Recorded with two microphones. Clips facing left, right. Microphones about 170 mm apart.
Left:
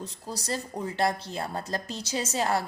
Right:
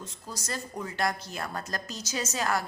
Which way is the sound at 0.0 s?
35° left (ahead or behind).